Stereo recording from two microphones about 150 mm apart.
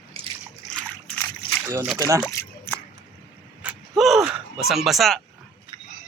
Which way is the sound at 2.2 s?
15° left (ahead or behind).